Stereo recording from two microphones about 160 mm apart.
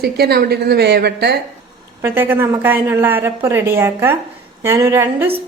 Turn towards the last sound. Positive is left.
turn(degrees=-15)  # may be behind; listen again after turning